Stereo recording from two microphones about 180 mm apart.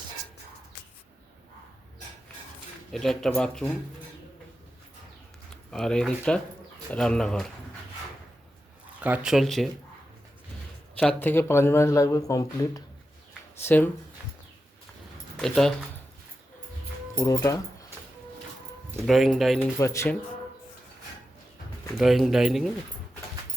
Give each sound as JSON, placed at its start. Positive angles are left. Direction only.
{"t": 2.9, "sound": "speech", "side_deg": 0}
{"t": 5.7, "sound": "speech", "side_deg": 5}
{"t": 9.0, "sound": "speech", "side_deg": -10}
{"t": 11.0, "sound": "speech", "side_deg": 10}
{"t": 15.4, "sound": "speech", "side_deg": 0}
{"t": 17.2, "sound": "speech", "side_deg": 15}
{"t": 19.0, "sound": "speech", "side_deg": 0}
{"t": 19.5, "sound": "speech", "side_deg": 15}
{"t": 21.9, "sound": "speech", "side_deg": 0}